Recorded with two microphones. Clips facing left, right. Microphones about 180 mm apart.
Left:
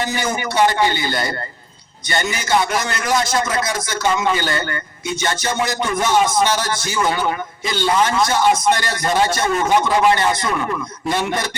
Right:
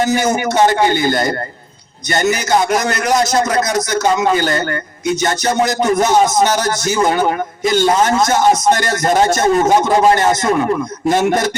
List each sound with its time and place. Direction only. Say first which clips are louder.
0.0 s a man's voice: right 7 dB; 45° right (ahead or behind)